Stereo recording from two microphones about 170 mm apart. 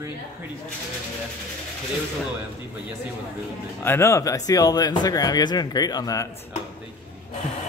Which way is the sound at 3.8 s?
15° left (ahead or behind).